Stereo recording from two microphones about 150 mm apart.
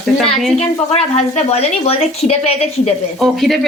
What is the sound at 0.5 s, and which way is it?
Speech, 45° left (ahead or behind).